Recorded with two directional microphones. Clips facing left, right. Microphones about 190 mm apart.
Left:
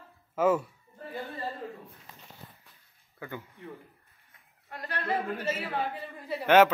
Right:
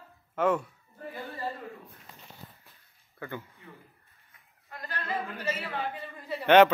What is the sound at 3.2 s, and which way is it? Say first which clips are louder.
Speech: right 1 dB; 15° left (ahead or behind).